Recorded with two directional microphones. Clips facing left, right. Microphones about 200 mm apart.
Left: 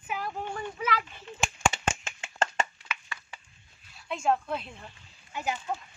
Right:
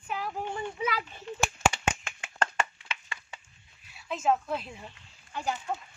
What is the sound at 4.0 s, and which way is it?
Speech, 5° right (ahead or behind).